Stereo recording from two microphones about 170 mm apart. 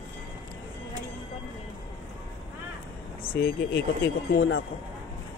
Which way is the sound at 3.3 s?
65° left (ahead or behind).